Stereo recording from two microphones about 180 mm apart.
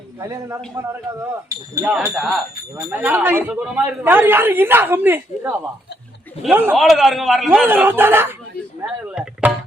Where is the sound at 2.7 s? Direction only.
15° right (ahead or behind).